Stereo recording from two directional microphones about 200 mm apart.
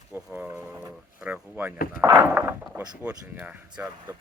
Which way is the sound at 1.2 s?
10° right (ahead or behind).